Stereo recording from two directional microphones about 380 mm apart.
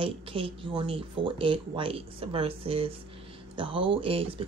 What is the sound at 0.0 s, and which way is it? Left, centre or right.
Speech, centre.